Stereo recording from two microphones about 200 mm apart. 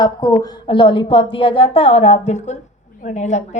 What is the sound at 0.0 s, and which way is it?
A woman's voice, 20° left (ahead or behind).